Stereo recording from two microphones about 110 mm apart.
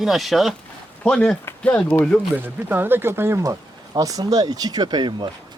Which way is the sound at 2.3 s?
15° right (ahead or behind).